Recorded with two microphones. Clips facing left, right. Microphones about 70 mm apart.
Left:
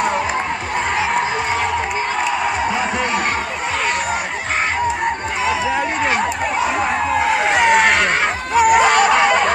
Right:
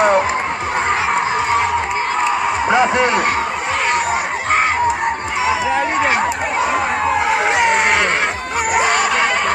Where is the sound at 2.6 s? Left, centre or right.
Right.